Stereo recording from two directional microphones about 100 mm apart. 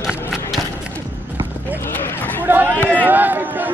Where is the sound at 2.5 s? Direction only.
20° right (ahead or behind).